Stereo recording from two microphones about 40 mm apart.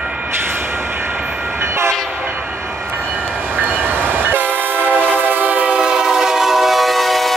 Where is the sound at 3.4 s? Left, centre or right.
Right.